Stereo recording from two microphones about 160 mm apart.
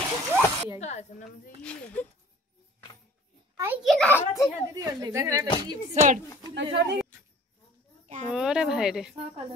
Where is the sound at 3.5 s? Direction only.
15° right (ahead or behind).